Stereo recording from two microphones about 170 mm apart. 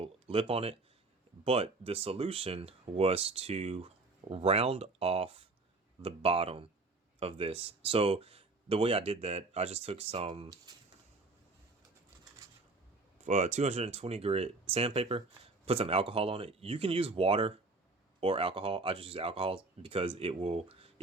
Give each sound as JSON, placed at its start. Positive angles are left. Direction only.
{"t": 0.0, "sound": "speech", "side_deg": -35}
{"t": 13.2, "sound": "speech", "side_deg": -40}